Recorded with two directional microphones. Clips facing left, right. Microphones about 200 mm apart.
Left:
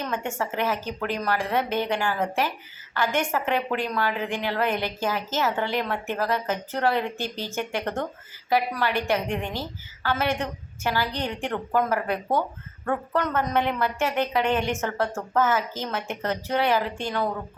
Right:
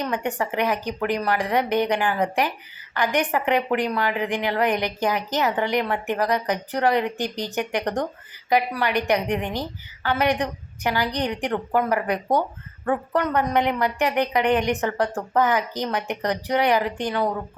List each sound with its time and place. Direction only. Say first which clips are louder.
0.0 s a woman's voice: right 3 dB; 15° right (ahead or behind)